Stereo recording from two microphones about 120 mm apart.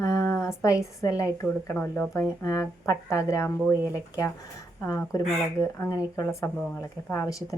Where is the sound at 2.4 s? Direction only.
30° left (ahead or behind).